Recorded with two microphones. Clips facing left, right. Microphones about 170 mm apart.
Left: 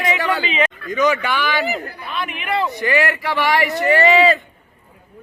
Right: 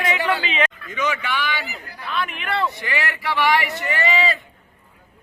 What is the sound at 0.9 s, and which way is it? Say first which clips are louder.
Speech: left 7 dB; 40° left (ahead or behind).